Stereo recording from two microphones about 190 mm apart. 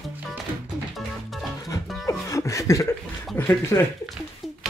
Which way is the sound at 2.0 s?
15° left (ahead or behind).